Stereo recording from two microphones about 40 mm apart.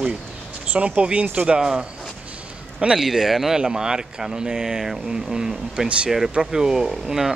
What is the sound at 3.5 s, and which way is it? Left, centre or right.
A man's voice, centre.